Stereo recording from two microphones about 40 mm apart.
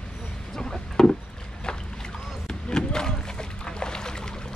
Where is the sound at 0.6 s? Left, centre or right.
Centre.